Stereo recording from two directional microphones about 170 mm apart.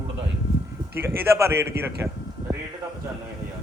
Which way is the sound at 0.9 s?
15° right (ahead or behind).